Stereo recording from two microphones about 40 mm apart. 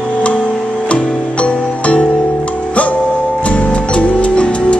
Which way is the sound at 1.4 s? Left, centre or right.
Left.